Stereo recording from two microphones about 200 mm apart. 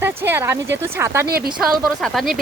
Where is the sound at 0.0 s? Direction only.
10° right (ahead or behind).